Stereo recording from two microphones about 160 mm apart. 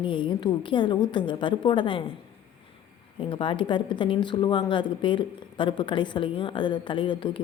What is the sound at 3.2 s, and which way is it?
A woman's voice, 35° left (ahead or behind).